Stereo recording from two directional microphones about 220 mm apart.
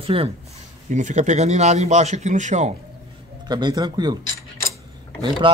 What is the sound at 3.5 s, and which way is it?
Speech, 20° right (ahead or behind).